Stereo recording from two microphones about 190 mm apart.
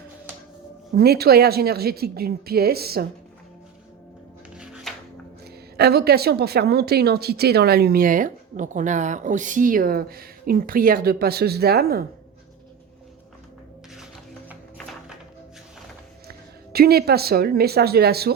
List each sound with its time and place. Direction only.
0.9 s speech: 55° right (ahead or behind)
4.5 s music: 5° right (ahead or behind)
5.7 s speech: 55° right (ahead or behind)
13.9 s music: centre (ahead or behind)
16.7 s speech: 55° right (ahead or behind)